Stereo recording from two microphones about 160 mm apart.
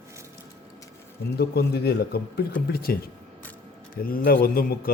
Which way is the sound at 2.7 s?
70° left (ahead or behind).